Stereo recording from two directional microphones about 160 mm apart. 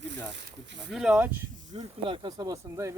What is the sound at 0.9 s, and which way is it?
Speech, 5° right (ahead or behind).